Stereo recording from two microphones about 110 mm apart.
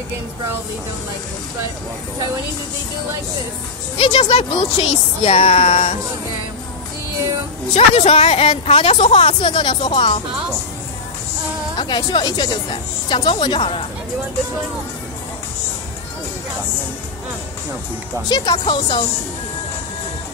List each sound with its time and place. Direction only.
4.0 s speech: 65° left (ahead or behind)
7.7 s a woman's voice: 70° left (ahead or behind); by 10.2 s 50° left (ahead or behind)
11.8 s a woman's voice: 45° left (ahead or behind)
18.3 s speech: 40° left (ahead or behind)